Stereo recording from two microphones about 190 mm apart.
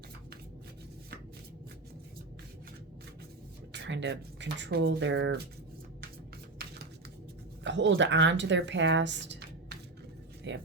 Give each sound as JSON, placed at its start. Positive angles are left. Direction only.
{"t": 3.7, "sound": "speech", "side_deg": -70}
{"t": 7.6, "sound": "speech", "side_deg": -70}